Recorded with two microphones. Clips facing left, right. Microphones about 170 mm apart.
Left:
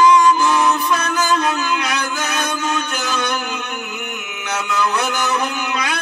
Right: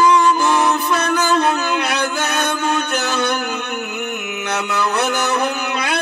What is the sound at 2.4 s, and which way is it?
Music, 60° right (ahead or behind).